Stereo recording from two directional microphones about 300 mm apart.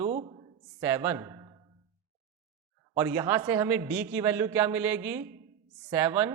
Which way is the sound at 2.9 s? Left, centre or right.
Centre.